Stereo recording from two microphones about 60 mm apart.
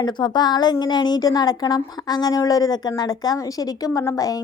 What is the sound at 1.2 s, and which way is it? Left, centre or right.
A woman's voice, left.